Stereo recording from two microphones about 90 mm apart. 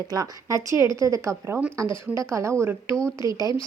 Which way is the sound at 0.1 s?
40° right (ahead or behind).